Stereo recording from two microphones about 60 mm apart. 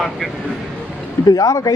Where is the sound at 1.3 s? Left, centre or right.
Left.